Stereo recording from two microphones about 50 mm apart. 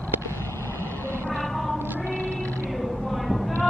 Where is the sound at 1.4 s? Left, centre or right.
Centre.